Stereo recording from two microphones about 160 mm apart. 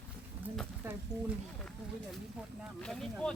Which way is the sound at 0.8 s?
15° right (ahead or behind).